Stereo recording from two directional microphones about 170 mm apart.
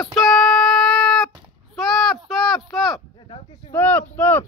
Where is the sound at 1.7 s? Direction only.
Centre (ahead or behind).